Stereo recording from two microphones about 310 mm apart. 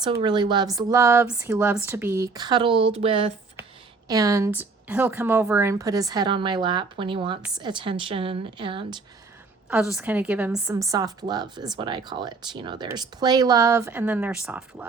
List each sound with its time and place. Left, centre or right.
0.0 s a woman's voice: centre
9.6 s a woman's voice: centre